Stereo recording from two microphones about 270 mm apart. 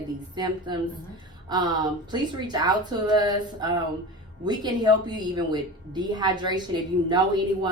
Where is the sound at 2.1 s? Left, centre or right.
Centre.